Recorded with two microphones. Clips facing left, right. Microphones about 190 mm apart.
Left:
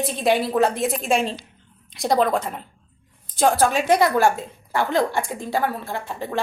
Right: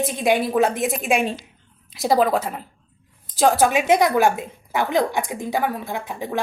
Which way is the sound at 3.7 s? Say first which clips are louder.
Right 1 dB; 15° right (ahead or behind).